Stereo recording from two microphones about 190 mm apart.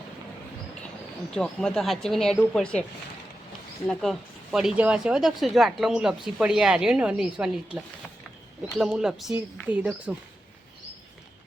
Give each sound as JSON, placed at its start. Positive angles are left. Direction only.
{"t": 1.3, "sound": "speech", "side_deg": 5}
{"t": 3.8, "sound": "speech", "side_deg": 0}
{"t": 8.8, "sound": "speech", "side_deg": -5}